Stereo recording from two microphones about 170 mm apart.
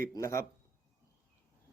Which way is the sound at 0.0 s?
20° left (ahead or behind).